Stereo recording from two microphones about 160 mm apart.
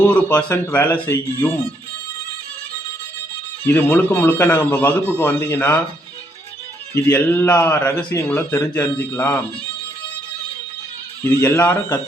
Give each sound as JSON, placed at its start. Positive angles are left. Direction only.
{"t": 0.0, "sound": "speech", "side_deg": 10}
{"t": 3.6, "sound": "speech", "side_deg": 10}
{"t": 6.9, "sound": "speech", "side_deg": 15}
{"t": 11.2, "sound": "speech", "side_deg": 15}